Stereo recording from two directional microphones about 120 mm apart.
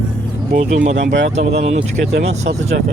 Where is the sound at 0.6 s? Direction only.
90° right; by 2.5 s 65° right (ahead or behind).